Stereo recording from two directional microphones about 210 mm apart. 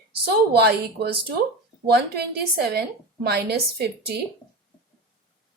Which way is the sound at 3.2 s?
50° right (ahead or behind).